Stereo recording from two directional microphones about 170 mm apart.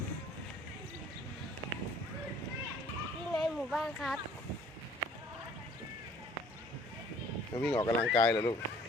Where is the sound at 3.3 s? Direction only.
Centre (ahead or behind).